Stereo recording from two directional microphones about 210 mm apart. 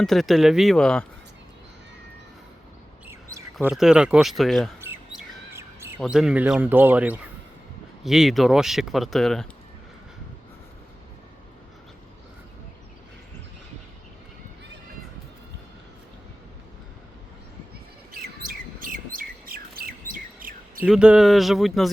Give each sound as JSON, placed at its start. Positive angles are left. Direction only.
{"t": 0.0, "sound": "speech", "side_deg": 0}
{"t": 3.1, "sound": "chirp", "side_deg": -15}
{"t": 3.7, "sound": "speech", "side_deg": -5}
{"t": 4.8, "sound": "chirp", "side_deg": -10}
{"t": 6.0, "sound": "speech", "side_deg": 0}
{"t": 18.8, "sound": "bird", "side_deg": -40}
{"t": 20.8, "sound": "speech", "side_deg": -5}